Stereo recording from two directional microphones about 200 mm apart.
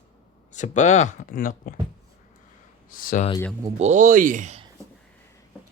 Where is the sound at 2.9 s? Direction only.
45° left (ahead or behind).